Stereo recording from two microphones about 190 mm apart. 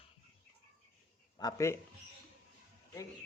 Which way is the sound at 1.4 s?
20° left (ahead or behind).